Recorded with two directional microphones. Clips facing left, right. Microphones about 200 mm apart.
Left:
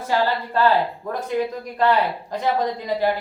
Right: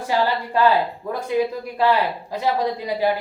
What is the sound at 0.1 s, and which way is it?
A woman's voice, 15° right (ahead or behind).